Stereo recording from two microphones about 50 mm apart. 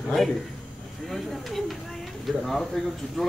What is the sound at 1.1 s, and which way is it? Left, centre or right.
A man's voice, centre.